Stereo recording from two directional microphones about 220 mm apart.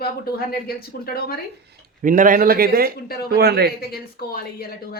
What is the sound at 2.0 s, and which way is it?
A man's voice, 35° right (ahead or behind).